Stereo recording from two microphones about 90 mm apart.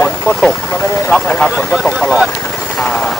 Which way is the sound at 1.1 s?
15° left (ahead or behind).